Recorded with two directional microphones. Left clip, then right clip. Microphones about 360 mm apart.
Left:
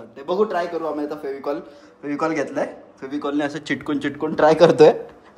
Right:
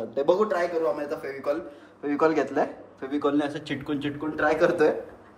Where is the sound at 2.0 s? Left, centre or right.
Centre.